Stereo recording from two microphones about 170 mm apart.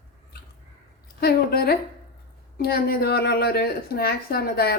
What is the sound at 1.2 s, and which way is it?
A woman's voice, 65° left (ahead or behind).